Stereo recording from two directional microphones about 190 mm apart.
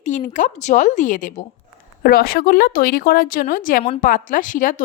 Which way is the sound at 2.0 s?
50° left (ahead or behind).